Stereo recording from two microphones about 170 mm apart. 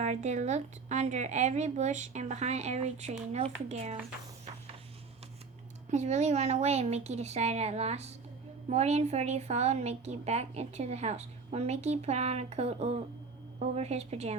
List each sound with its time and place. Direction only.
0.0 s speech: 45° right (ahead or behind)
5.9 s a woman's voice: 45° right (ahead or behind)